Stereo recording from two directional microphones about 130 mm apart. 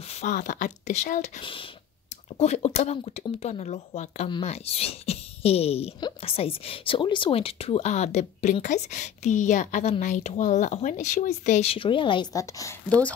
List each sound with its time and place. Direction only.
0.1 s speech: 75° left (ahead or behind)
1.4 s a woman's voice: 40° left (ahead or behind)
2.3 s a woman's voice: 55° left (ahead or behind)
11.7 s a woman's voice: 40° left (ahead or behind)